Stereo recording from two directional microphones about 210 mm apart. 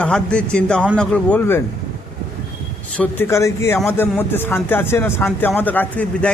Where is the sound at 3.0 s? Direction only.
10° left (ahead or behind).